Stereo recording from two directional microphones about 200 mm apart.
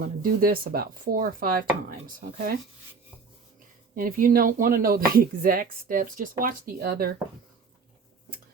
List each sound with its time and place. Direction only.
0.2 s speech: 45° right (ahead or behind)
3.9 s speech: 45° right (ahead or behind)